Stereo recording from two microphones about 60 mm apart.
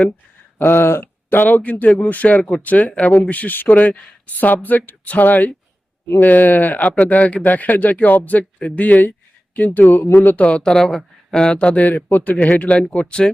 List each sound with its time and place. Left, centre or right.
0.6 s speech: left; by 13.3 s centre